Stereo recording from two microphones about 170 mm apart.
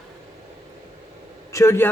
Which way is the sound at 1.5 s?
15° left (ahead or behind).